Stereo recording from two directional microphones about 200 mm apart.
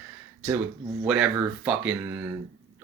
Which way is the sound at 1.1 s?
5° right (ahead or behind).